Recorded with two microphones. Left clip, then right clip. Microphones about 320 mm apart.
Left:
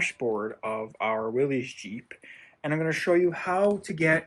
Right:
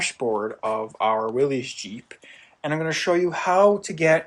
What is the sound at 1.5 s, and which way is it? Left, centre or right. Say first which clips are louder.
Speech: right 3 dB; right.